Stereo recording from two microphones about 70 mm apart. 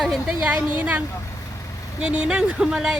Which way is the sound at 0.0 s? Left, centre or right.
Centre.